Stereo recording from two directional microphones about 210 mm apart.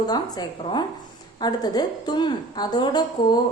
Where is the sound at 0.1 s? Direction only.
20° left (ahead or behind).